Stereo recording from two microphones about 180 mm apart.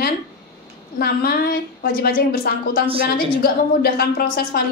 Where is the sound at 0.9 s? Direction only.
60° left (ahead or behind).